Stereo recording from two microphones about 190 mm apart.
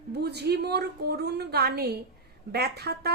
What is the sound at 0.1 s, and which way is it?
A woman's voice, 60° right (ahead or behind).